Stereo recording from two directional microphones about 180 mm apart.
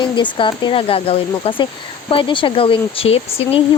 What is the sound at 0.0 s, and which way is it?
Speech, 25° left (ahead or behind).